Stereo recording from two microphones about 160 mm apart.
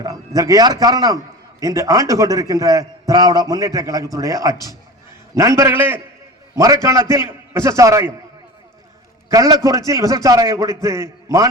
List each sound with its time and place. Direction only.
0.0 s a man's voice: 20° right (ahead or behind)
9.3 s a man's voice: 20° right (ahead or behind)